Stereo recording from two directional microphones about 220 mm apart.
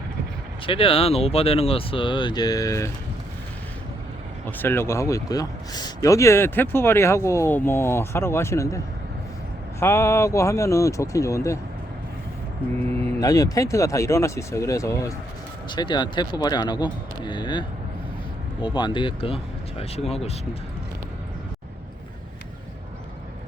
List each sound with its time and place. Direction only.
0.6 s speech: 25° left (ahead or behind)
4.4 s speech: 10° left (ahead or behind)
9.8 s speech: 15° left (ahead or behind)
13.1 s speech: 15° left (ahead or behind)